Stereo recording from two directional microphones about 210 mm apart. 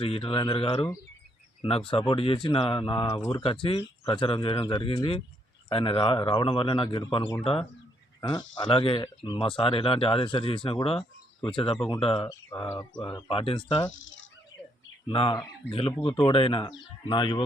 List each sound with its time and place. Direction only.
0.0 s speech: 25° left (ahead or behind)
3.4 s speech: 25° left (ahead or behind)
13.9 s speech: 65° left (ahead or behind)
15.0 s speech: 25° left (ahead or behind)